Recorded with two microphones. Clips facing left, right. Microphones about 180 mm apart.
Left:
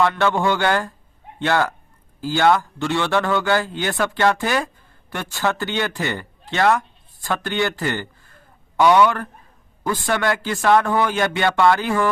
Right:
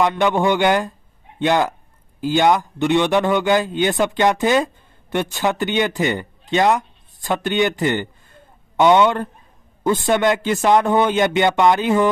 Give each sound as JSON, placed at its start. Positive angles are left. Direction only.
{"t": 0.0, "sound": "a man's voice", "side_deg": -15}